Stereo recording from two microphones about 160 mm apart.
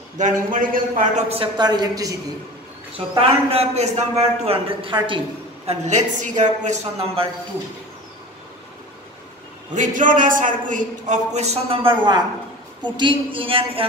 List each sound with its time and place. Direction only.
0.2 s a man's voice: 55° right (ahead or behind)
1.3 s a woman's voice: 30° right (ahead or behind)
3.2 s a man's voice: 40° right (ahead or behind)
5.7 s a man's voice: 45° right (ahead or behind)
9.8 s a man's voice: 55° right (ahead or behind); by 13.8 s 35° right (ahead or behind)